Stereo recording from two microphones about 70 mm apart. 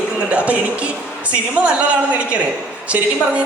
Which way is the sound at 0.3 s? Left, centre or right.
Centre.